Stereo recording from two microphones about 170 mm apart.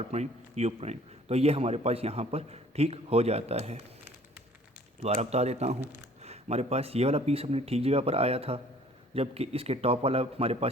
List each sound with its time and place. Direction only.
0.0 s a man's voice: 40° right (ahead or behind)
5.1 s a man's voice: 40° right (ahead or behind)